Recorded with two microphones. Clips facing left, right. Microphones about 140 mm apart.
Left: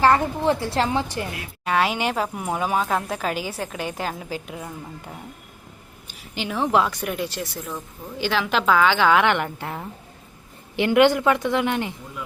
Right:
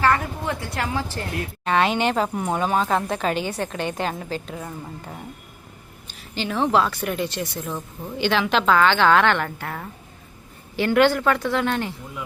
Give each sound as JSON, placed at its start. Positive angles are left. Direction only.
{"t": 0.0, "sound": "a woman's voice", "side_deg": 30}
{"t": 1.6, "sound": "a woman's voice", "side_deg": 5}